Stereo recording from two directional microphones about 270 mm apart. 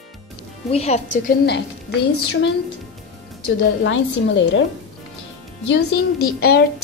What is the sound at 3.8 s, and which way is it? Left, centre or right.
Speech, left.